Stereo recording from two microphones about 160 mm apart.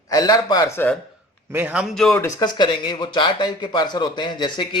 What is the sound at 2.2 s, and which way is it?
Speech, 25° left (ahead or behind).